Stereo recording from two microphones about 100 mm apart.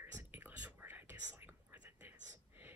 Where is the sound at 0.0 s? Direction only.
20° right (ahead or behind).